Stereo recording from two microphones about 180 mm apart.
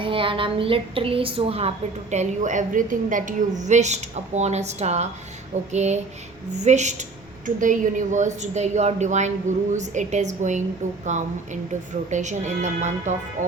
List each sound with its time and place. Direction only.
0.0 s a woman's voice: 30° right (ahead or behind)